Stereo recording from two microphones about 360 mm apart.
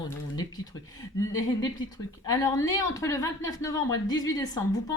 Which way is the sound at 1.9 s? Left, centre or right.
Centre.